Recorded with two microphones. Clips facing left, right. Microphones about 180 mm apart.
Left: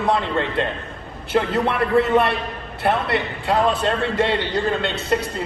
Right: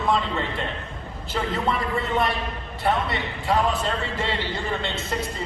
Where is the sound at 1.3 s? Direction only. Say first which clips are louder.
Left 6 dB; 65° left (ahead or behind).